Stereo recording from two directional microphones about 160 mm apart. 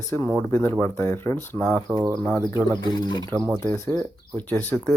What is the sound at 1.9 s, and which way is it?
Speech, 15° right (ahead or behind).